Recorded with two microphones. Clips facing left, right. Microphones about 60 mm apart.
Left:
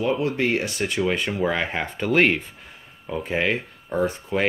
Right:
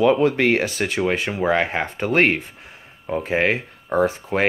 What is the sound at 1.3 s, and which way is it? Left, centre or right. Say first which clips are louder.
Speech: right 4 dB; right.